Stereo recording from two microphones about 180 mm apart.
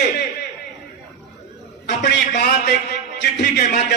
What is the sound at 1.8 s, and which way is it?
A man's voice, 65° left (ahead or behind).